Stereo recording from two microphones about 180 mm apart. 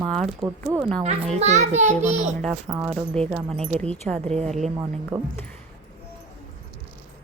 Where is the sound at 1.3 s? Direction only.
40° right (ahead or behind).